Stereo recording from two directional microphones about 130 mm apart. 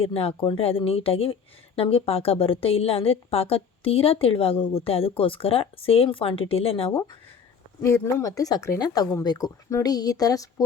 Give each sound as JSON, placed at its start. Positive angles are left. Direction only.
{"t": 0.0, "sound": "a woman's voice", "side_deg": 50}
{"t": 7.8, "sound": "speech", "side_deg": 20}